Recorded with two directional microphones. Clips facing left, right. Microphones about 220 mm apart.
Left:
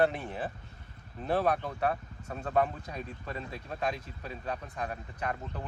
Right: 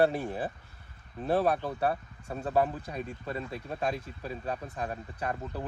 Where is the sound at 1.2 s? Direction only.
30° right (ahead or behind).